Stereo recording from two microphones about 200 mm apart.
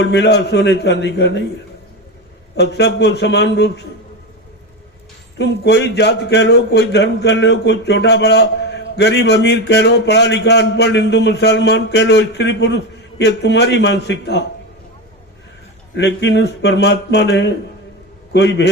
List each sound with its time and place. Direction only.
0.0 s a man's voice: 60° left (ahead or behind)
2.6 s a man's voice: 60° left (ahead or behind)
5.4 s a man's voice: 60° left (ahead or behind)
16.0 s a man's voice: 60° left (ahead or behind)